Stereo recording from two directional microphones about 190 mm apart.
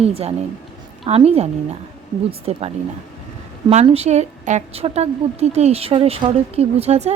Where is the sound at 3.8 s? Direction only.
35° right (ahead or behind).